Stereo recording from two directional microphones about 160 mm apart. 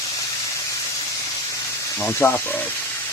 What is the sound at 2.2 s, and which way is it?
Speech, 10° left (ahead or behind).